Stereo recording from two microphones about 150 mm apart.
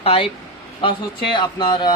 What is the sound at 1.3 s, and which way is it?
Speech, 30° left (ahead or behind).